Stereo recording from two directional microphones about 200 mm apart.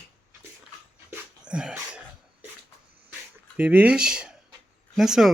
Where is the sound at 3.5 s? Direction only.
10° right (ahead or behind).